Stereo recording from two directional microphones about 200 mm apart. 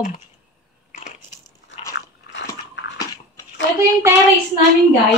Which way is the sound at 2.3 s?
65° left (ahead or behind).